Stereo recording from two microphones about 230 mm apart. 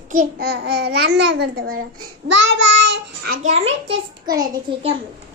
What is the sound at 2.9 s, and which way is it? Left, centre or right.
Child singing, right.